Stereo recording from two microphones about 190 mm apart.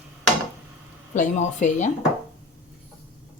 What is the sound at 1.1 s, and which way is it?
Speech, 40° left (ahead or behind).